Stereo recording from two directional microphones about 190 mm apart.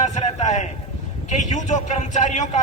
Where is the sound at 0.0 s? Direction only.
40° left (ahead or behind).